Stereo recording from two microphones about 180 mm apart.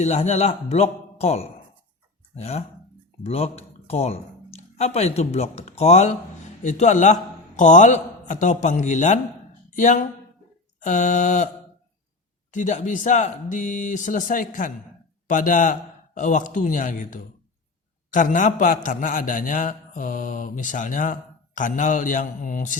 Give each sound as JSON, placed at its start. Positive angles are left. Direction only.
{"t": 0.0, "sound": "a man's voice", "side_deg": 40}
{"t": 12.5, "sound": "a man's voice", "side_deg": 45}